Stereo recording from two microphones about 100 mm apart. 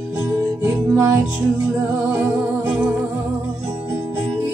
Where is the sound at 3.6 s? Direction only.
25° right (ahead or behind).